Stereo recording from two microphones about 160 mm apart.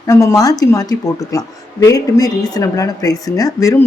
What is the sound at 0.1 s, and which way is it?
Speech, 20° left (ahead or behind).